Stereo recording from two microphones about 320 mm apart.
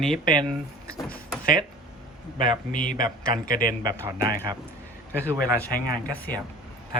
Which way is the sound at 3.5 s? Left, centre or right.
Left.